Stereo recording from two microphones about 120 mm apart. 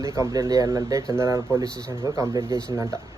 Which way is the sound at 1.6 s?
10° left (ahead or behind).